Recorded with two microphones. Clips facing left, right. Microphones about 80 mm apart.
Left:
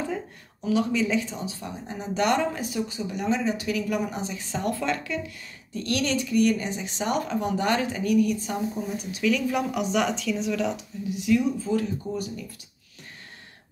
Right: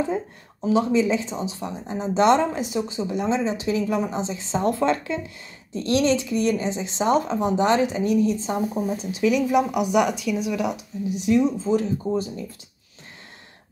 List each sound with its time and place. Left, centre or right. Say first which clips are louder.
0.7 s speech: right 4 dB; right